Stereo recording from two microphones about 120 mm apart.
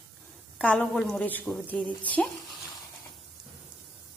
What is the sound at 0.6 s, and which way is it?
Speech, 10° left (ahead or behind).